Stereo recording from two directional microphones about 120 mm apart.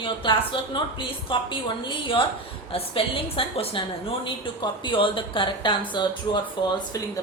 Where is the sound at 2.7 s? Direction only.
50° left (ahead or behind).